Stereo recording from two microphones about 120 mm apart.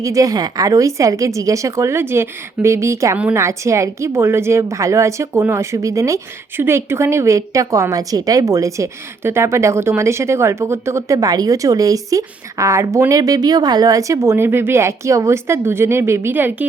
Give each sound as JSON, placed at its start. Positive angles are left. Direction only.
{"t": 0.0, "sound": "a woman's voice", "side_deg": -30}